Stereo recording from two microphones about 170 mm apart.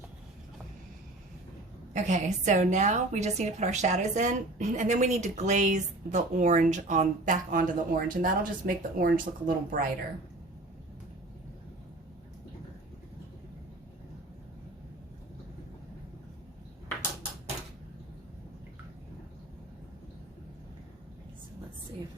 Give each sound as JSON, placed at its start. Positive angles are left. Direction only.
{"t": 1.9, "sound": "a woman's voice", "side_deg": -45}